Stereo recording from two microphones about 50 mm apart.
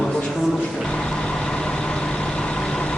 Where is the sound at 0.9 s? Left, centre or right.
Centre.